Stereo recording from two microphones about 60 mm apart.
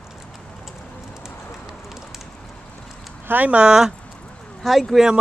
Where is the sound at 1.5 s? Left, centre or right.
Centre.